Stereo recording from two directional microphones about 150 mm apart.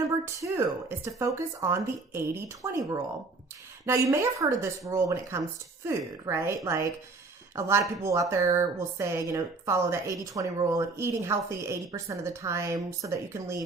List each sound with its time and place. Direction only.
0.3 s speech: 20° right (ahead or behind)
3.8 s speech: 20° right (ahead or behind)